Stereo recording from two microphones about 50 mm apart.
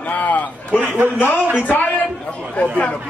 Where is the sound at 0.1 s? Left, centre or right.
Left.